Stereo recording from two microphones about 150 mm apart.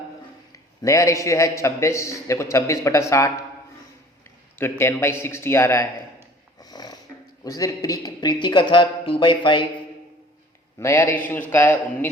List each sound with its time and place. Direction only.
0.8 s a man's voice: 20° left (ahead or behind)
4.5 s a man's voice: 15° left (ahead or behind)
6.6 s snoring: 25° left (ahead or behind)
7.4 s speech: 25° left (ahead or behind)
10.8 s a man's voice: 15° left (ahead or behind)